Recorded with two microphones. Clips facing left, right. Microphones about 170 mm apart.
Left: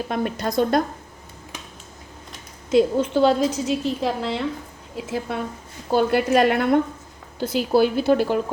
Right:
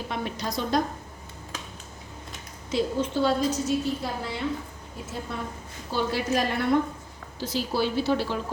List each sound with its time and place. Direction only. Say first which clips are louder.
0.1 s a woman's voice: left 6 dB; 55° left (ahead or behind)
2.7 s a woman's voice: left 8 dB; 75° left (ahead or behind); by 5.1 s 90° left
5.9 s a woman's voice: left 8 dB; 55° left (ahead or behind)